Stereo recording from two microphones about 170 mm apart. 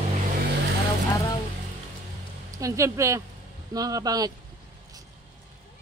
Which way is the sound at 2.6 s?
20° right (ahead or behind).